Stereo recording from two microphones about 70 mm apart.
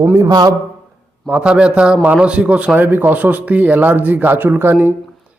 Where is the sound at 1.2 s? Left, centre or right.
Centre.